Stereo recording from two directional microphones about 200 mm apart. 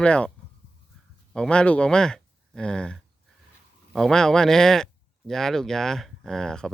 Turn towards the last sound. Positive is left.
turn(degrees=5)  # may be behind; listen again after turning